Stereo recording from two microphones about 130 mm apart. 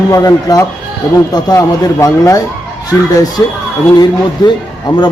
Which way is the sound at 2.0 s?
25° left (ahead or behind).